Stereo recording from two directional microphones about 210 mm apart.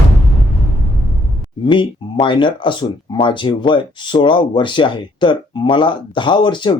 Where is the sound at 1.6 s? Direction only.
25° left (ahead or behind).